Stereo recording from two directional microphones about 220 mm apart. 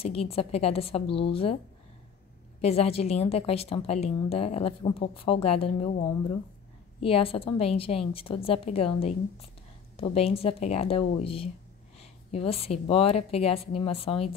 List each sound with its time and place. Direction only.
0.0 s a woman's voice: 25° left (ahead or behind)
2.6 s a woman's voice: 25° left (ahead or behind)
12.0 s a sound: 25° left (ahead or behind)
12.8 s a woman's voice: 25° left (ahead or behind)